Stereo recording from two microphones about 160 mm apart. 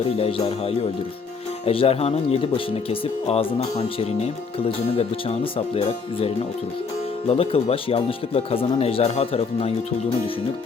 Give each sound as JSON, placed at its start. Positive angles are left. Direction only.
{"t": 0.2, "sound": "speech", "side_deg": 35}